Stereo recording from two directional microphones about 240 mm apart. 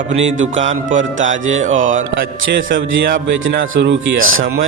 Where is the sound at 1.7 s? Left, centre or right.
Right.